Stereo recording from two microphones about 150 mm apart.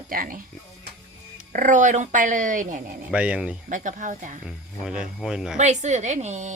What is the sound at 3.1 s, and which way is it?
Speech, 10° right (ahead or behind).